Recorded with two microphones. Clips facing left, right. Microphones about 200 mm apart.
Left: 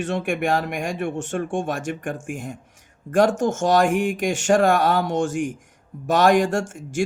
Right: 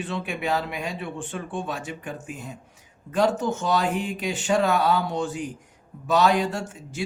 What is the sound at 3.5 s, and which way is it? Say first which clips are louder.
Speech: left 6 dB; 85° left.